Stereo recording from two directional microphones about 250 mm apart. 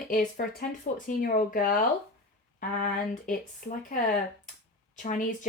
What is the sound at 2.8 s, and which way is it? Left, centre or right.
Speech, left.